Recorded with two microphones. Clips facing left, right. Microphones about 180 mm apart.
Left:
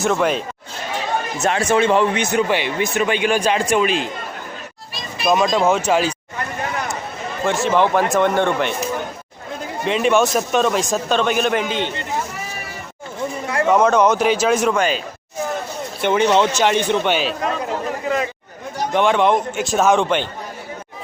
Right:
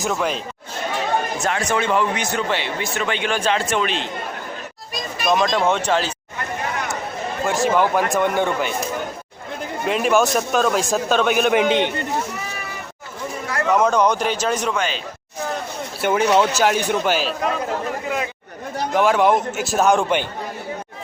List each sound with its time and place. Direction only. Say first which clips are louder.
0.0 s a man's voice: left 4 dB; centre (ahead or behind)
1.4 s speech: left 4 dB; 25° left (ahead or behind); by 4.1 s 10° left (ahead or behind)
5.2 s speech: left 2 dB; 5° left (ahead or behind)
7.4 s a man's voice: left 1 dB; centre (ahead or behind)
9.8 s a man's voice: left 1 dB; 5° right (ahead or behind)
13.5 s a sound: left 3 dB; 25° left (ahead or behind)
13.7 s a man's voice: left 2 dB; 5° left (ahead or behind)
18.9 s a man's voice: even; 5° right (ahead or behind)